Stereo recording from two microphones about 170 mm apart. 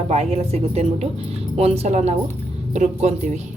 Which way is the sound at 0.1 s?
40° right (ahead or behind).